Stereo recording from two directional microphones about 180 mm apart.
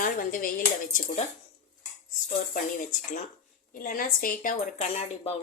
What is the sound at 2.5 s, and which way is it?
Speech, 45° left (ahead or behind).